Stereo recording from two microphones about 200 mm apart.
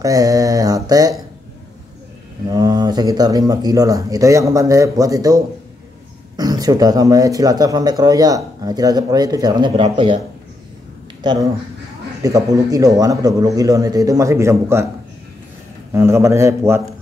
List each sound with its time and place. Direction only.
0.0 s speech: 15° right (ahead or behind)
2.4 s speech: 20° right (ahead or behind)
12.2 s speech: 20° right (ahead or behind)
15.9 s speech: 15° right (ahead or behind)